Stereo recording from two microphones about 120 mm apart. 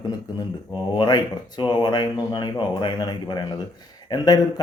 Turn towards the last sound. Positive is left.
turn(degrees=35)  # may be behind; listen again after turning